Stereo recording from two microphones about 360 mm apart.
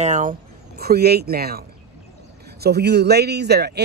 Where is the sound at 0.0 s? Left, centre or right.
Centre.